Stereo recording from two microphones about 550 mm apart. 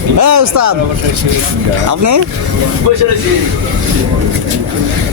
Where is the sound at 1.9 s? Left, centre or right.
Right.